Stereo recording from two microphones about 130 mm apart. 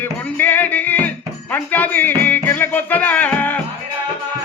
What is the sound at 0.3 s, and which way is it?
Music, 15° left (ahead or behind).